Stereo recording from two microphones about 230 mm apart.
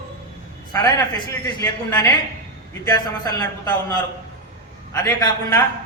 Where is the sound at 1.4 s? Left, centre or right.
Centre.